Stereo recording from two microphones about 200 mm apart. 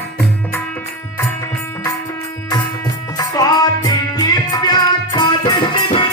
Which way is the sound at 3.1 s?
20° left (ahead or behind).